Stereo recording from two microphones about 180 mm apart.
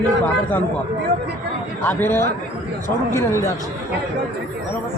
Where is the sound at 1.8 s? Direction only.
10° left (ahead or behind).